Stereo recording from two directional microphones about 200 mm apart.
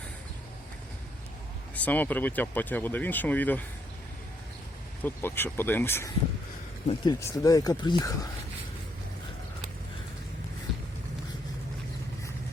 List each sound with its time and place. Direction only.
1.7 s speech: 10° left (ahead or behind)
5.0 s speech: 10° left (ahead or behind)